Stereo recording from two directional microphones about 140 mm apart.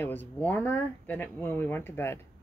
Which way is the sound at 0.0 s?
15° left (ahead or behind).